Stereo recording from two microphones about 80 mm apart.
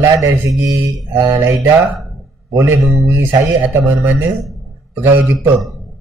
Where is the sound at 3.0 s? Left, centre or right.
Right.